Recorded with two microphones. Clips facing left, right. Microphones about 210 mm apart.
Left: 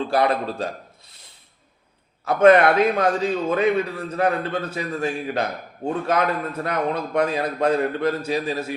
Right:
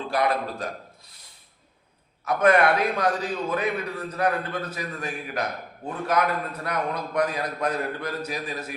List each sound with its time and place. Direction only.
0.1 s a man's voice: 30° left (ahead or behind)
2.2 s a man's voice: 25° left (ahead or behind)